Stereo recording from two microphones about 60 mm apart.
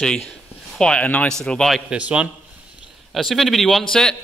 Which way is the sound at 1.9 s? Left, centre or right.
Right.